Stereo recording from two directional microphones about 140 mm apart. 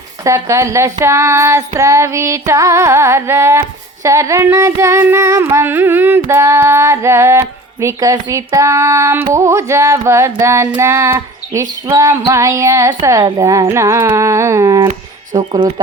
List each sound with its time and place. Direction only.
0.3 s child singing: 20° right (ahead or behind)
15.4 s speech: 30° right (ahead or behind)